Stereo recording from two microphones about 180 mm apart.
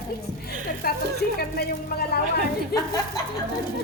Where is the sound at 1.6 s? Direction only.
60° left (ahead or behind).